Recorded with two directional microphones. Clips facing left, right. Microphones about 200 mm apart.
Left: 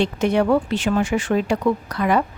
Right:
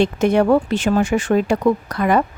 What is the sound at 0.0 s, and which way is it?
Speech, 50° right (ahead or behind).